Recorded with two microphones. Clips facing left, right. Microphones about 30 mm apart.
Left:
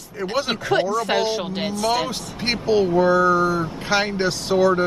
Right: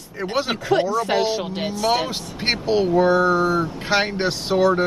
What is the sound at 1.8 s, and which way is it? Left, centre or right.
Speech, centre.